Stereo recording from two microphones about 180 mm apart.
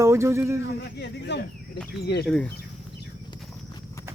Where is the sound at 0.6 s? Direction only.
70° left (ahead or behind).